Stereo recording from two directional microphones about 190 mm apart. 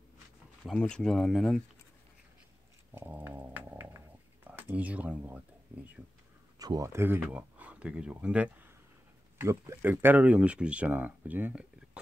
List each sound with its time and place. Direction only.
0.7 s speech: 5° left (ahead or behind)
2.9 s dog: 10° right (ahead or behind)
4.5 s speech: 10° right (ahead or behind)
6.6 s speech: 20° right (ahead or behind)